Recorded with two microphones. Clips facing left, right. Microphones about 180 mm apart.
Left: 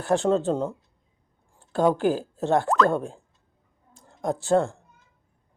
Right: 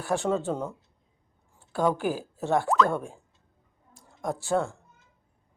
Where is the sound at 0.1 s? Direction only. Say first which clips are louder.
Left 5 dB; 20° left (ahead or behind).